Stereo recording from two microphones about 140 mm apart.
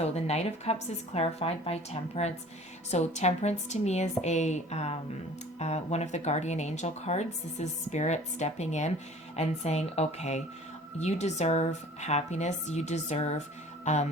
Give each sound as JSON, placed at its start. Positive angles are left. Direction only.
{"t": 0.0, "sound": "speech", "side_deg": 50}